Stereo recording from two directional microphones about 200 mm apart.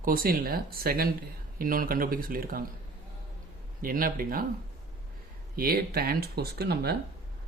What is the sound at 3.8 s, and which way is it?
Speech, 45° right (ahead or behind).